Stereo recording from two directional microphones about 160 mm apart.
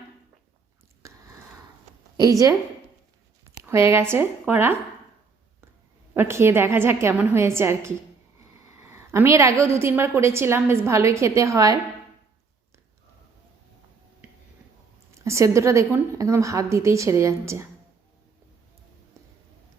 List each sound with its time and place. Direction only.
1.0 s a sound: 20° right (ahead or behind)
2.1 s a woman's voice: 20° right (ahead or behind)
3.6 s a woman's voice: 15° right (ahead or behind)
6.1 s a woman's voice: 15° right (ahead or behind)
15.1 s a woman's voice: 20° right (ahead or behind)